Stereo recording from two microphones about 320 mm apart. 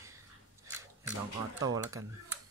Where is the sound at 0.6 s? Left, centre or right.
Centre.